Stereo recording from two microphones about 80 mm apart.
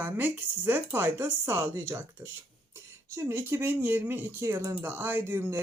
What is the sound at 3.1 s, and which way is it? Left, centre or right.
Speech, right.